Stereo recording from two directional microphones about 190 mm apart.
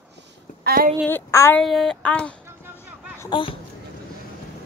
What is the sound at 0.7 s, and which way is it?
Speech, 45° right (ahead or behind).